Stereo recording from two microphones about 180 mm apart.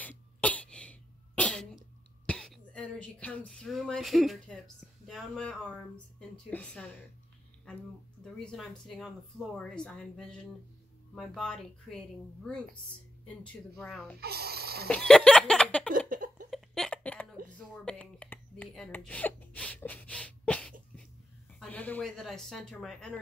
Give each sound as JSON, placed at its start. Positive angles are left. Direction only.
{"t": 0.0, "sound": "cough", "side_deg": 10}
{"t": 2.2, "sound": "speech", "side_deg": 0}
{"t": 8.2, "sound": "speech", "side_deg": 0}
{"t": 13.4, "sound": "speech", "side_deg": 5}
{"t": 14.2, "sound": "speech", "side_deg": -60}
{"t": 14.9, "sound": "a sound", "side_deg": 5}
{"t": 16.1, "sound": "a sound", "side_deg": -45}
{"t": 16.4, "sound": "a sound", "side_deg": 0}
{"t": 21.5, "sound": "speech", "side_deg": 10}